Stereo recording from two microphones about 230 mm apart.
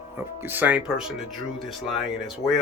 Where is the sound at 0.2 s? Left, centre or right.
Centre.